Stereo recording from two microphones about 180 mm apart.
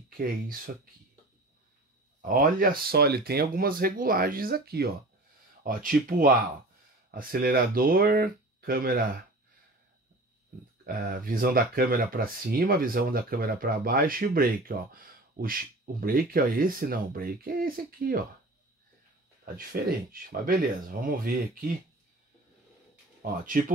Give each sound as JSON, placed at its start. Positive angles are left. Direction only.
{"t": 2.2, "sound": "speech", "side_deg": -50}
{"t": 10.9, "sound": "speech", "side_deg": -50}
{"t": 19.4, "sound": "speech", "side_deg": -55}
{"t": 23.2, "sound": "speech", "side_deg": -50}